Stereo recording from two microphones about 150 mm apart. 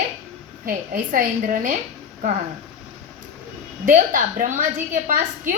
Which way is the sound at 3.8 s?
60° right (ahead or behind).